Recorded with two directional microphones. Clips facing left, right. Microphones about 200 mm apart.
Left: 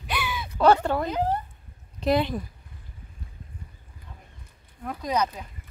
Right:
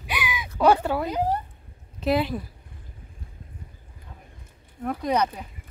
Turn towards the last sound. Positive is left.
turn(degrees=-55)  # may be behind; listen again after turning